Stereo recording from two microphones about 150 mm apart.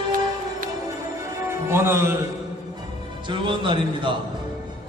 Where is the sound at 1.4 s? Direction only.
15° right (ahead or behind).